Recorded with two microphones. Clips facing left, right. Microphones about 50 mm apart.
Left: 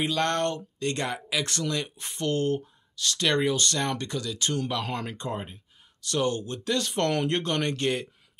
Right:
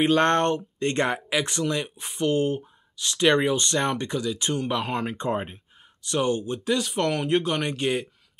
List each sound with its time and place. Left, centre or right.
0.0 s speech: right
1.4 s speech: centre
6.0 s speech: centre